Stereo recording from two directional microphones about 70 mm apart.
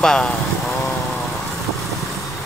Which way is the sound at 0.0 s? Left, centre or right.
Centre.